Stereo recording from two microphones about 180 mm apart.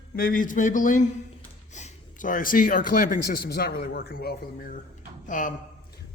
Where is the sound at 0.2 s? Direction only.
50° left (ahead or behind).